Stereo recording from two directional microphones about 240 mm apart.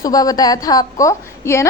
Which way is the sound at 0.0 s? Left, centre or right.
Centre.